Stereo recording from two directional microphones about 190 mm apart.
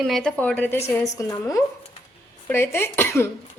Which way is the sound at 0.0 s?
Centre (ahead or behind).